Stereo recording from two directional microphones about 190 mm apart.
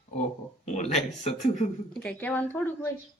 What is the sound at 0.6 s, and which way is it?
Speech, 35° left (ahead or behind).